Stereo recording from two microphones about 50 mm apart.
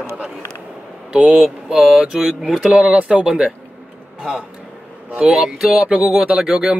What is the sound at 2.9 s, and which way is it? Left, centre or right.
Speech, right.